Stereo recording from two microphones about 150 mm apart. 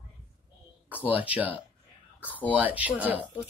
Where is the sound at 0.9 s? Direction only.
10° right (ahead or behind).